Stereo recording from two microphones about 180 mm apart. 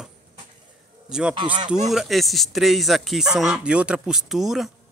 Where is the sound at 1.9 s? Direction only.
Centre (ahead or behind).